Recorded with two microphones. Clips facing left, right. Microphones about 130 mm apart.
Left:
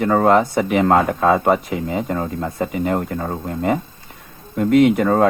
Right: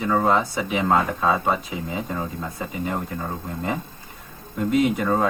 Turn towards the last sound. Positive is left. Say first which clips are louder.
# left 7 dB
turn(degrees=65)  # may be behind; listen again after turning